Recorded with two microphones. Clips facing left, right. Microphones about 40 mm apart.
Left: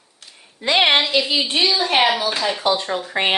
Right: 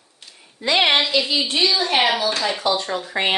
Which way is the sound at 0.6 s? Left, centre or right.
Left.